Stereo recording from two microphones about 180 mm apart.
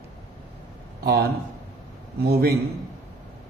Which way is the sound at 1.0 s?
60° right (ahead or behind).